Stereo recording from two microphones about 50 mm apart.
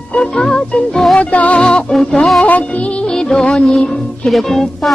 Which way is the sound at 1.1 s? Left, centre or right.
Left.